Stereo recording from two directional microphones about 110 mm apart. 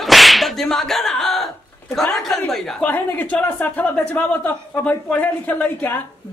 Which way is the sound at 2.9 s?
15° left (ahead or behind).